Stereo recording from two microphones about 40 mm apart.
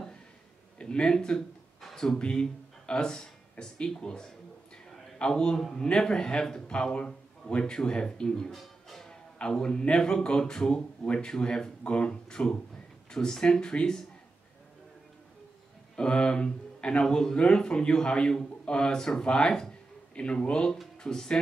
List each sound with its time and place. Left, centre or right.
0.7 s speech: left
1.8 s a sound: centre
2.1 s speech: left
8.5 s music: centre
9.1 s speech: centre
16.0 s speech: left